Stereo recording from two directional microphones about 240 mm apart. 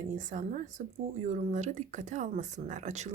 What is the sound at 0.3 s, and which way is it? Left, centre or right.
Speech, right.